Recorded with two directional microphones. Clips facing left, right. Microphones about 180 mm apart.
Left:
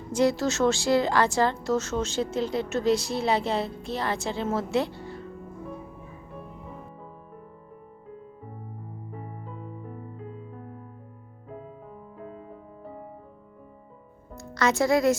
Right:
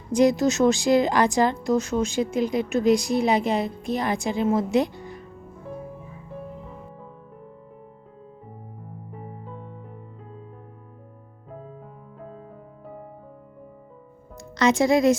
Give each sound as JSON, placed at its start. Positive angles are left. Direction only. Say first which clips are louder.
{"t": 0.1, "sound": "speech", "louder": "right 4 dB", "side_deg": -15}
{"t": 14.3, "sound": "music", "louder": "right 4 dB", "side_deg": -15}